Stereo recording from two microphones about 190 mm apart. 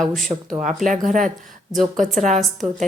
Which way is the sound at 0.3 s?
25° right (ahead or behind).